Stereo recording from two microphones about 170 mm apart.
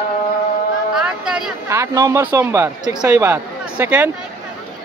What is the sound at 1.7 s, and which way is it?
Speech, 20° right (ahead or behind).